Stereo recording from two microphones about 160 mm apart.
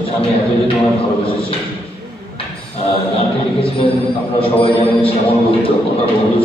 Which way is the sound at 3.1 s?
40° left (ahead or behind).